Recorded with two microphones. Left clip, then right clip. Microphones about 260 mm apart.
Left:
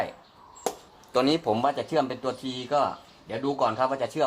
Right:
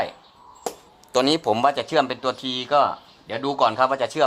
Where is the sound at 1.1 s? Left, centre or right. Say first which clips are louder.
Right 4 dB; right.